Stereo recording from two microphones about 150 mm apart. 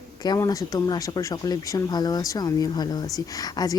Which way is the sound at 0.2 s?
25° left (ahead or behind).